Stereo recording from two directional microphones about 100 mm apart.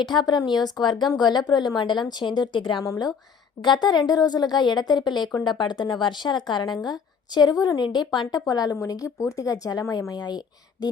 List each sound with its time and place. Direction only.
0.0 s a woman's voice: 45° left (ahead or behind)
2.8 s a woman's voice: 40° left (ahead or behind)
8.7 s speech: 30° left (ahead or behind)